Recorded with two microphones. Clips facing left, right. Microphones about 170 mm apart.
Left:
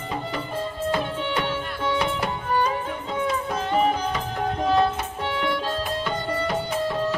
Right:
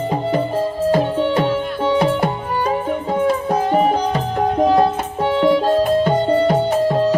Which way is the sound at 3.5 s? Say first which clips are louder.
Right 4 dB; 45° right (ahead or behind).